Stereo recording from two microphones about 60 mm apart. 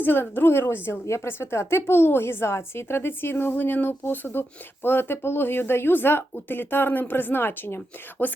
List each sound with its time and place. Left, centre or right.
0.0 s a woman's voice: left
1.0 s a woman's voice: left